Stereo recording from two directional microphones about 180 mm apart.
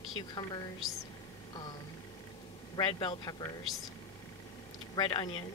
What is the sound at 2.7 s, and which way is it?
Speech, 25° left (ahead or behind).